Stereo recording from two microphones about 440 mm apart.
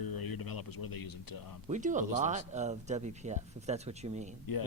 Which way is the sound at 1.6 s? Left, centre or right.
Centre.